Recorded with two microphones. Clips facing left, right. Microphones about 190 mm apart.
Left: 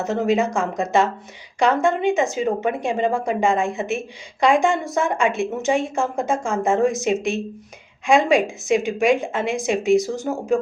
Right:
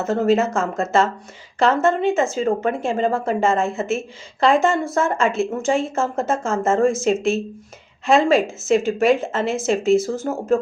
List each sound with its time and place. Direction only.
0.0 s a woman's voice: 15° left (ahead or behind)